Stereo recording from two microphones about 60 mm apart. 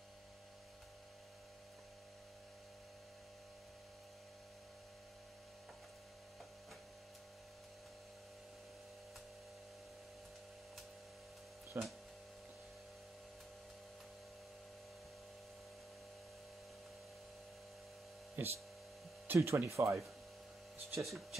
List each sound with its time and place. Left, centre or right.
11.7 s speech: right
18.4 s a sound: right
19.2 s speech: right
19.7 s speech: right
21.0 s speech: centre